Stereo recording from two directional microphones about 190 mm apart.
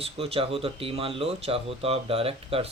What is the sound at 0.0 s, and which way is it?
Speech, 30° right (ahead or behind).